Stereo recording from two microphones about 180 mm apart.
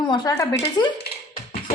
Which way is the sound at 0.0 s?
25° left (ahead or behind).